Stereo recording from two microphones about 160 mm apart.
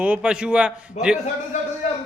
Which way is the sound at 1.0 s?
45° left (ahead or behind).